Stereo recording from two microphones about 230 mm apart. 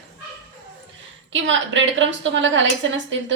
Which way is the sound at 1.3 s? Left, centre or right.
Right.